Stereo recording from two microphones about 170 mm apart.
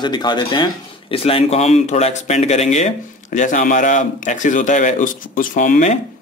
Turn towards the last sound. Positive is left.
turn(degrees=50)  # may be behind; listen again after turning